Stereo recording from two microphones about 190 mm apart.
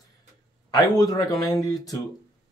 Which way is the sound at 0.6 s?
20° left (ahead or behind).